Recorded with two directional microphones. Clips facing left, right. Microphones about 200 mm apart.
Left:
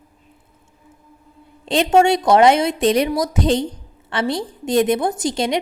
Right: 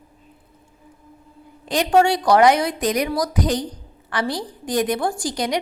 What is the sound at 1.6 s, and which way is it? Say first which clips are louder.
A woman's voice: left 2 dB; 25° left (ahead or behind).